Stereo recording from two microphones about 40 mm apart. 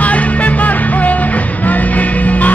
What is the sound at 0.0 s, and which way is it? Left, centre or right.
Music, left.